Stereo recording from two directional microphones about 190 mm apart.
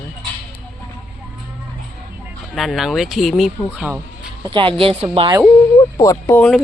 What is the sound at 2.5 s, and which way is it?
Speech, centre (ahead or behind).